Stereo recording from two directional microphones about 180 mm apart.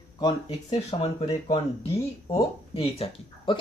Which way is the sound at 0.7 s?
35° left (ahead or behind).